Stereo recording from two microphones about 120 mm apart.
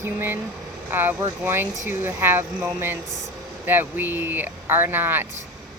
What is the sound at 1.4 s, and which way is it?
Speech, 15° right (ahead or behind).